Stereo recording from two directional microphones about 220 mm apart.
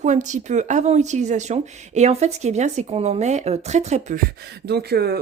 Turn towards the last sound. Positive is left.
turn(degrees=-45)  # may be behind; listen again after turning